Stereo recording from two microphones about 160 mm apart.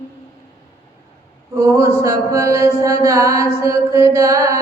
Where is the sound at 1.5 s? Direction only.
15° right (ahead or behind).